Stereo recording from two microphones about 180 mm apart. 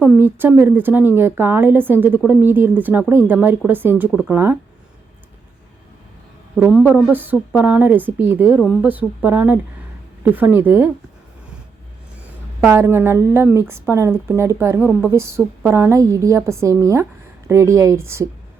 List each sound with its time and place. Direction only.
0.0 s a woman's voice: 10° right (ahead or behind)
6.6 s a woman's voice: 5° right (ahead or behind)
12.6 s a woman's voice: 15° right (ahead or behind)